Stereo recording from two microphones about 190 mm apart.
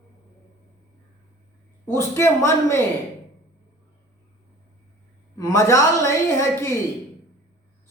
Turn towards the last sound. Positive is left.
turn(degrees=15)  # may be behind; listen again after turning